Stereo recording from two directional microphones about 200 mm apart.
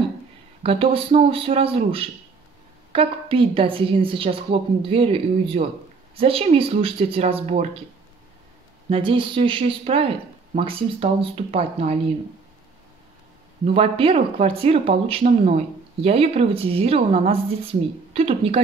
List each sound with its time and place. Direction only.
0.6 s speech: 30° right (ahead or behind)
8.8 s speech: 25° right (ahead or behind)
13.7 s speech: 30° right (ahead or behind)